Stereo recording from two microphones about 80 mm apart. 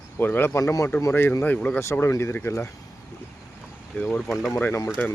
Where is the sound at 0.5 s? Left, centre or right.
Left.